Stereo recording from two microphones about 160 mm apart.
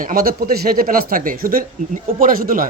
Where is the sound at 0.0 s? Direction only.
65° right (ahead or behind).